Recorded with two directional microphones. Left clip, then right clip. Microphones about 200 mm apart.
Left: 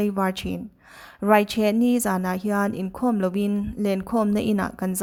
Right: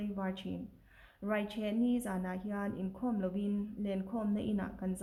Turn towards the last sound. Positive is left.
turn(degrees=40)  # may be behind; listen again after turning